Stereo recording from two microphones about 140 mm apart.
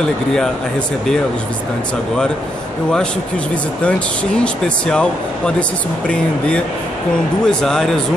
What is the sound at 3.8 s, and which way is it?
Speech, 10° left (ahead or behind).